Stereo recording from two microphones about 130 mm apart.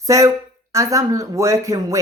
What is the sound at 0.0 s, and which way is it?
Speech, 25° right (ahead or behind).